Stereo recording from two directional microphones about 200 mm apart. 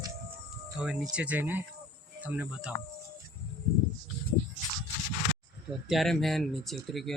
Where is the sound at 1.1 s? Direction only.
5° right (ahead or behind).